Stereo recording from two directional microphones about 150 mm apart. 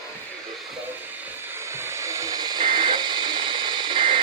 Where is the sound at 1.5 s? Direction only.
15° right (ahead or behind).